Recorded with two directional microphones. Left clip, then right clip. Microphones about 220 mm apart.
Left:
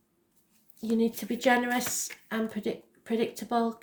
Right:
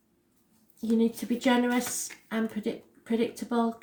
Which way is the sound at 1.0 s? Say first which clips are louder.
Right 1 dB; 40° left (ahead or behind).